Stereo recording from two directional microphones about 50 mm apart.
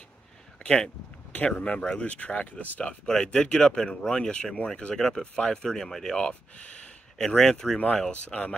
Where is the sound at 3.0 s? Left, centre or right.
Centre.